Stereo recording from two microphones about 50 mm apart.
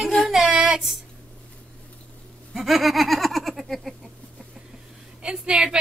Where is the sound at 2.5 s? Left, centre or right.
Centre.